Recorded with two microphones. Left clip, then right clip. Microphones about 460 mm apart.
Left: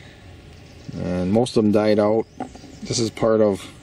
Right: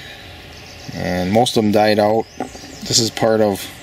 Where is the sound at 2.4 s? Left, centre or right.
Centre.